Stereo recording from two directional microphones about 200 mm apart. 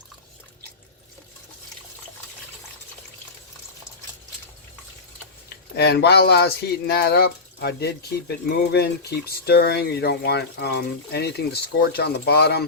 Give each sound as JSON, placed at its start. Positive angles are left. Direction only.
{"t": 5.7, "sound": "speech", "side_deg": 55}